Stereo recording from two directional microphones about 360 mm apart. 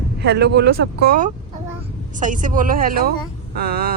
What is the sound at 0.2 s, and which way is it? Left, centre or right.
A woman's voice, right.